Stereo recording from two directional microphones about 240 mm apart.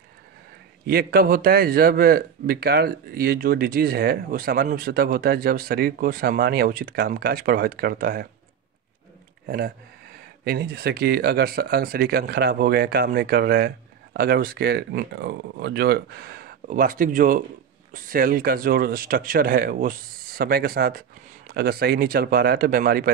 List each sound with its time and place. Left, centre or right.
0.8 s speech: right
10.4 s speech: right